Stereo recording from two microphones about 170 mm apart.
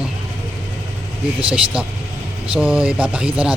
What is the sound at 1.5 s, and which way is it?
Speech, 5° right (ahead or behind).